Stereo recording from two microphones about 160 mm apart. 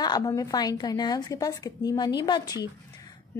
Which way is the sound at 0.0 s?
25° left (ahead or behind).